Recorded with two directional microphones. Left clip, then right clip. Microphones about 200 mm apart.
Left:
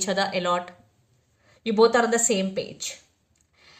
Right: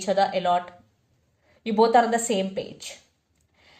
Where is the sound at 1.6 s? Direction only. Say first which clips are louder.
Even; 35° left (ahead or behind).